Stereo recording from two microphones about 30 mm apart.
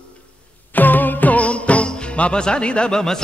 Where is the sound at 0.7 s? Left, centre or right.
Left.